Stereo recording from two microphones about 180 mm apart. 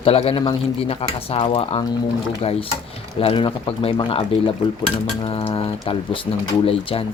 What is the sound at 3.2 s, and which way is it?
Speech, 30° left (ahead or behind).